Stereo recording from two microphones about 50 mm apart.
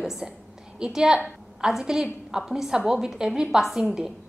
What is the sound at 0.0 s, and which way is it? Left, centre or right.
A woman's voice, centre.